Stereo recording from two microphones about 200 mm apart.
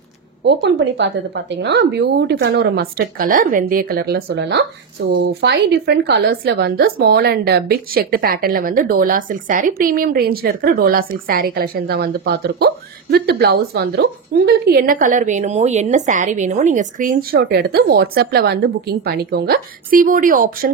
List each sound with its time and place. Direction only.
0.5 s a woman's voice: 60° right (ahead or behind); by 20.7 s 45° right (ahead or behind)